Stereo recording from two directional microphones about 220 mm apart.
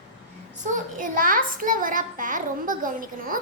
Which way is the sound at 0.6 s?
35° right (ahead or behind).